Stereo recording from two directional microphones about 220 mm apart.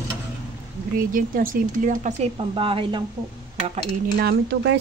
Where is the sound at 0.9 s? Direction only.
40° right (ahead or behind).